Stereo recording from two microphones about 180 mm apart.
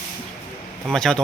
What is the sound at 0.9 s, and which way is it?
Speech, 5° left (ahead or behind).